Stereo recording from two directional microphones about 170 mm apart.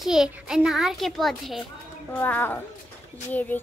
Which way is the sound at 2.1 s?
10° left (ahead or behind).